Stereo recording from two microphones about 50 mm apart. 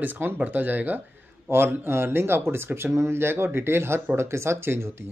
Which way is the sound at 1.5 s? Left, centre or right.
Right.